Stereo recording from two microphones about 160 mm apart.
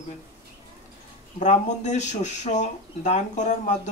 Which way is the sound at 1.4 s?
45° left (ahead or behind).